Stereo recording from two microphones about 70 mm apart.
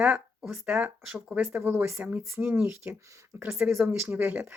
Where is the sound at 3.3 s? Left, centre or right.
Right.